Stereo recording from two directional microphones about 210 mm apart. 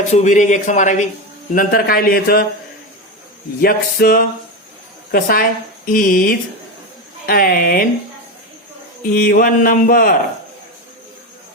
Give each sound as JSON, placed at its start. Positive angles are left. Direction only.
{"t": 0.1, "sound": "a man's voice", "side_deg": 35}
{"t": 3.6, "sound": "speech", "side_deg": 45}
{"t": 9.0, "sound": "speech", "side_deg": 45}